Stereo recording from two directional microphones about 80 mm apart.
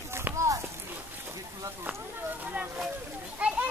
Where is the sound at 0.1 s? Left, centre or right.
Right.